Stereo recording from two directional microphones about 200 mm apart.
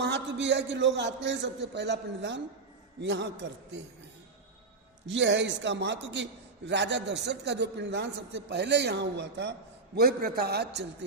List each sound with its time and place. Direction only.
0.0 s a man's voice: 60° right (ahead or behind)
5.0 s a man's voice: 65° right (ahead or behind)